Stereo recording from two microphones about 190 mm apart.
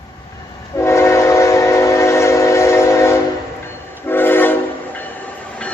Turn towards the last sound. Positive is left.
turn(degrees=10)  # may be behind; listen again after turning